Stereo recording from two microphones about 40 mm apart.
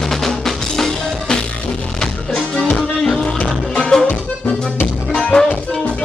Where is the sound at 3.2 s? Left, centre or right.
Left.